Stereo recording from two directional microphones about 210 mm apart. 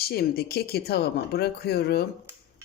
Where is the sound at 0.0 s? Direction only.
50° left (ahead or behind).